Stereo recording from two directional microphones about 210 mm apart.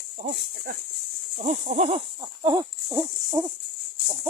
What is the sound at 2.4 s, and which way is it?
Hoot, 20° right (ahead or behind).